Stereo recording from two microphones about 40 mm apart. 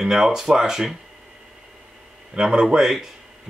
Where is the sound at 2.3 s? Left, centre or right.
Centre.